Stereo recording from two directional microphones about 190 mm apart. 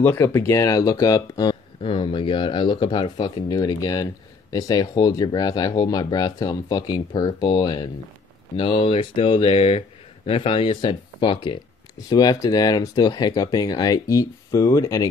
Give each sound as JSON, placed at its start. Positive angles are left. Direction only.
{"t": 0.0, "sound": "speech", "side_deg": 15}